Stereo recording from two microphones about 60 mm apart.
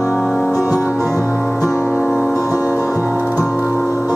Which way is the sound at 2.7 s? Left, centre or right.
Left.